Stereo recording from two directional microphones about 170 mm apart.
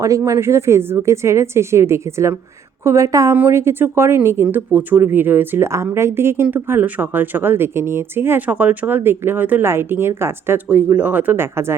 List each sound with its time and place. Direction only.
0.0 s a woman's voice: 15° right (ahead or behind)